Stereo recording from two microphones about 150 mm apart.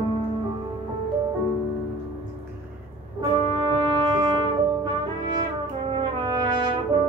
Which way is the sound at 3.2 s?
35° right (ahead or behind).